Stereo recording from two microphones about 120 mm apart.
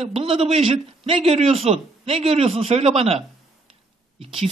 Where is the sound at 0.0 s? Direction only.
50° right (ahead or behind).